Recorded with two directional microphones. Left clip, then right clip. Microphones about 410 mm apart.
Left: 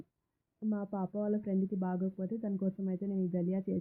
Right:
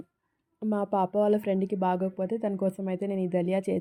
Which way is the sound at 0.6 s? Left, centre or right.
Centre.